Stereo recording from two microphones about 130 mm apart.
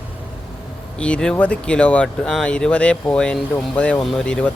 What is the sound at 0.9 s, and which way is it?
A man's voice, 10° left (ahead or behind).